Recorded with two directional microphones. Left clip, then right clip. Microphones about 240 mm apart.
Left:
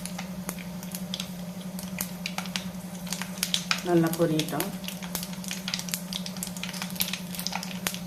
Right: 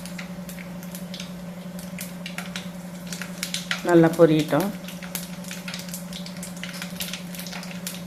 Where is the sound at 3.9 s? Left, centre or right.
Right.